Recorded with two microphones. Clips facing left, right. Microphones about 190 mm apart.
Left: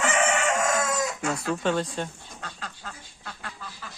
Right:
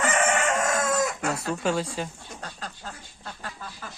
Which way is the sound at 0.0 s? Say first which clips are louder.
Even; 55° right (ahead or behind).